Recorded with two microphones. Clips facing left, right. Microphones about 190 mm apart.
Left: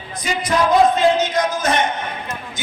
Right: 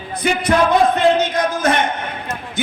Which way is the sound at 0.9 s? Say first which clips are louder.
Right 1 dB; 60° right (ahead or behind).